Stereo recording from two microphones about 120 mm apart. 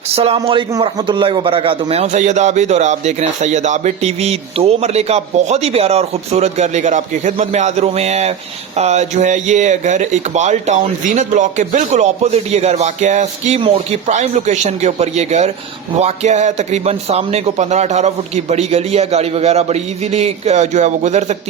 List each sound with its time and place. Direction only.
0.8 s a man's voice: 40° right (ahead or behind); by 13.6 s 75° right (ahead or behind)
14.1 s a man's voice: 90° right